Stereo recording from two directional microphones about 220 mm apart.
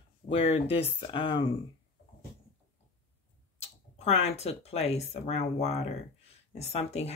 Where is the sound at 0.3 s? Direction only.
25° left (ahead or behind).